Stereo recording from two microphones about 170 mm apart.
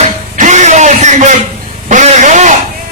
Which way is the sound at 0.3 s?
45° right (ahead or behind).